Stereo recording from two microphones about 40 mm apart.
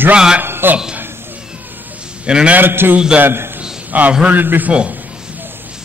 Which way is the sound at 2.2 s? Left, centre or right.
Right.